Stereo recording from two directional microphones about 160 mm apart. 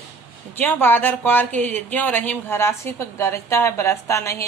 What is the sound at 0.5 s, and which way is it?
Speech, 10° left (ahead or behind).